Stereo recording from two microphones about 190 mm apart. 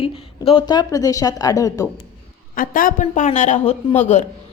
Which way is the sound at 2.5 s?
45° left (ahead or behind).